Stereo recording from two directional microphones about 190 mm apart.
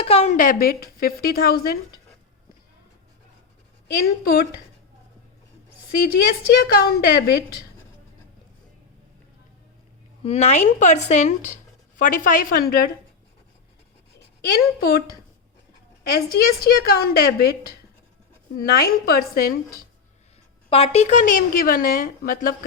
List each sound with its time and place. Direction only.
0.0 s speech: 30° left (ahead or behind); by 2.0 s 50° left (ahead or behind)
4.2 s a woman's voice: 55° left (ahead or behind)
6.6 s a woman's voice: 55° left (ahead or behind)
10.2 s speech: 35° left (ahead or behind); by 12.9 s 50° left (ahead or behind)
14.2 s a woman's voice: 55° left (ahead or behind)
16.1 s speech: 55° left (ahead or behind)
20.7 s speech: 30° left (ahead or behind); by 22.5 s 50° left (ahead or behind)